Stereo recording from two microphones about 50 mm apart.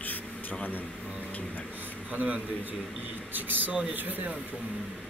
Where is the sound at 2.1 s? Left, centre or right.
Right.